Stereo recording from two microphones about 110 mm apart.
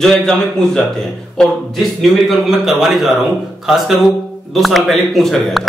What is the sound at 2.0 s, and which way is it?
A man's voice, 5° right (ahead or behind).